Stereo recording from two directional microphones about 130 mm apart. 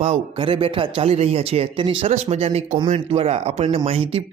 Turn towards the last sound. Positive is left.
turn(degrees=-45)  # may be behind; listen again after turning